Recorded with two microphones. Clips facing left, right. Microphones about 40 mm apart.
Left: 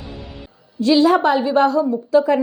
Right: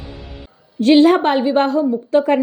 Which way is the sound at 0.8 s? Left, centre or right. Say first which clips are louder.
Right 3 dB; right.